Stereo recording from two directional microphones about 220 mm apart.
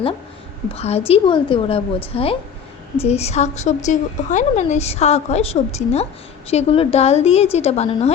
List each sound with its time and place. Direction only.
0.7 s a woman's voice: 30° left (ahead or behind)